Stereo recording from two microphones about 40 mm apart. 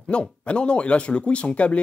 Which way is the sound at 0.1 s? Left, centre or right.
Left.